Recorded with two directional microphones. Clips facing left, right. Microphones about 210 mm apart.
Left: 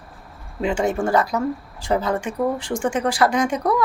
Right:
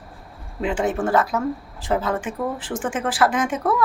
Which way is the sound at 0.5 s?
Centre (ahead or behind).